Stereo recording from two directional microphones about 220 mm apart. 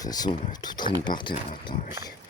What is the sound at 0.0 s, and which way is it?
Speech, 15° left (ahead or behind).